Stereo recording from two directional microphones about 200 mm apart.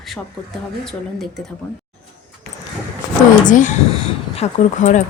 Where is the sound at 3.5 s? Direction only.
40° left (ahead or behind).